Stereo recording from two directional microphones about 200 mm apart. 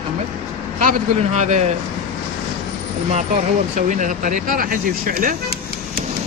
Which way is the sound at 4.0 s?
40° right (ahead or behind).